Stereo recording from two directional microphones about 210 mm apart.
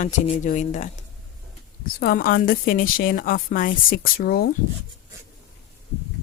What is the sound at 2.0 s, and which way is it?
A woman's voice, 45° left (ahead or behind).